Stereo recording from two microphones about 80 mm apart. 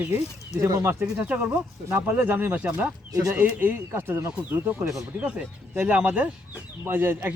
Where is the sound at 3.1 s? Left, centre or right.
Right.